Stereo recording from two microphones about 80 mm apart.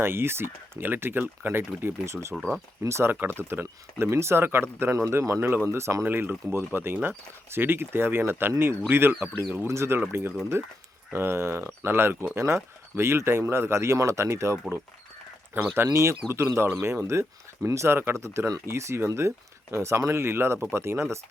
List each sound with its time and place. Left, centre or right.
0.0 s speech: right
6.1 s speech: right
15.7 s speech: right